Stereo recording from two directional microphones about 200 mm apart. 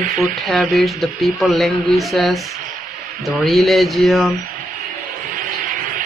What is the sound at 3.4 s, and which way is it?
Speech, centre (ahead or behind).